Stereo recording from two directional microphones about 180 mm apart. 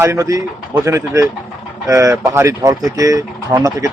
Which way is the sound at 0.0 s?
15° right (ahead or behind).